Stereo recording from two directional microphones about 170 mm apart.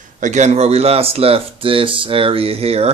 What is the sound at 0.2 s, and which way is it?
Speech, 45° right (ahead or behind).